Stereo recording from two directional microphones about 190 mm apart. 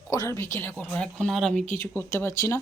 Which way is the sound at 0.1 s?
15° left (ahead or behind).